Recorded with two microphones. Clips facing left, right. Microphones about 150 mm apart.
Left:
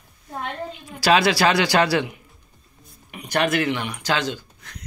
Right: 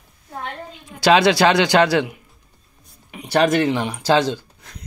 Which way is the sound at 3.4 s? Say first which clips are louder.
Right 5 dB; 40° right (ahead or behind).